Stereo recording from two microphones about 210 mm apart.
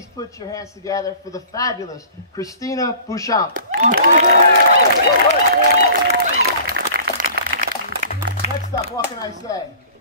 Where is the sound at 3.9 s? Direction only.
45° right (ahead or behind).